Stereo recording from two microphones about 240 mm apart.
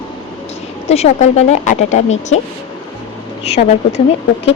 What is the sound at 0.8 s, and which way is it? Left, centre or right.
Speech, left.